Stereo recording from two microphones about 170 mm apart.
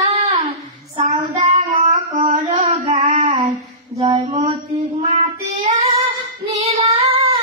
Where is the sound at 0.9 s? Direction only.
40° right (ahead or behind).